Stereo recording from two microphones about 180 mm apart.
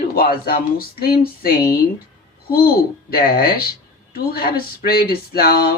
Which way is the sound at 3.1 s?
55° left (ahead or behind).